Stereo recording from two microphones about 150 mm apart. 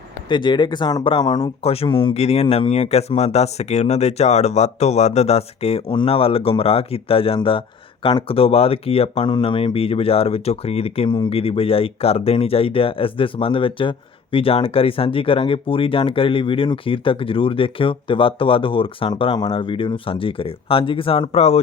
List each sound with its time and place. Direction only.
0.3 s speech: 30° left (ahead or behind)